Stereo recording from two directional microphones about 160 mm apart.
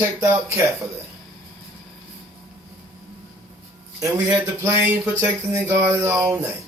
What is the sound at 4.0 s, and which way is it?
A man's voice, 20° right (ahead or behind).